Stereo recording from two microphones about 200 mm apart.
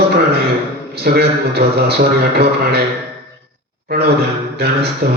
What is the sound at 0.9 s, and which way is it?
A man's voice, 55° right (ahead or behind).